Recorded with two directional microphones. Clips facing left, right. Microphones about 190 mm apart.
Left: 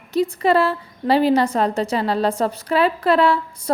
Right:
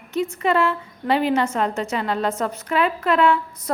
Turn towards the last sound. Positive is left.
turn(degrees=35)  # may be behind; listen again after turning